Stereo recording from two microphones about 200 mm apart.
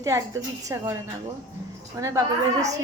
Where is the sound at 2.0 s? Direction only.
15° right (ahead or behind).